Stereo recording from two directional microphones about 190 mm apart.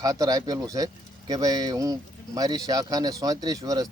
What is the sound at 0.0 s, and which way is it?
Speech, 20° right (ahead or behind).